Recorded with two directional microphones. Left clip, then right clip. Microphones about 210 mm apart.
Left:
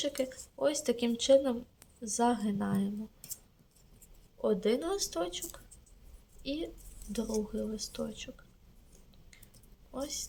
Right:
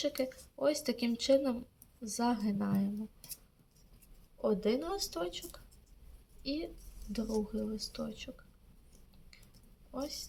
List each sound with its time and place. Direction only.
0.0 s a woman's voice: 5° left (ahead or behind)
4.4 s a woman's voice: 20° left (ahead or behind)
9.9 s a woman's voice: 20° left (ahead or behind)